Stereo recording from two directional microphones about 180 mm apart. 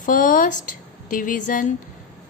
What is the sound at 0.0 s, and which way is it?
Speech, 50° left (ahead or behind).